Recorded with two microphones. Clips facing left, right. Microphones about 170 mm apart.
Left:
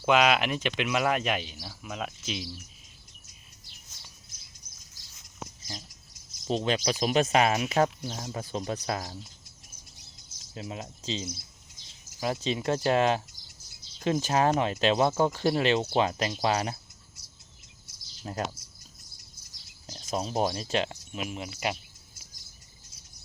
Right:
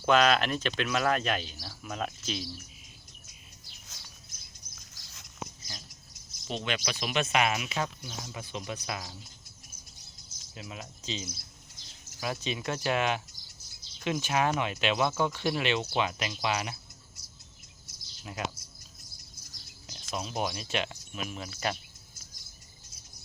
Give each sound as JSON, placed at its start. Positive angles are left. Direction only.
{"t": 0.0, "sound": "speech", "side_deg": 10}
{"t": 6.3, "sound": "speech", "side_deg": 40}
{"t": 10.5, "sound": "speech", "side_deg": 30}
{"t": 18.2, "sound": "speech", "side_deg": 35}
{"t": 19.9, "sound": "speech", "side_deg": 35}